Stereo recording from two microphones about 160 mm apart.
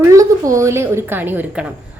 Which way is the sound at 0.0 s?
20° right (ahead or behind).